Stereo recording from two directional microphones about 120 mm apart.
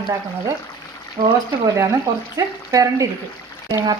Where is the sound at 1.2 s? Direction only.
35° right (ahead or behind).